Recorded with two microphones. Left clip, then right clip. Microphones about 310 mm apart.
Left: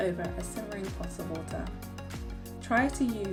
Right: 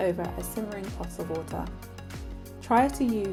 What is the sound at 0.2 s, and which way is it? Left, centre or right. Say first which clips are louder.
Speech: right 3 dB; centre.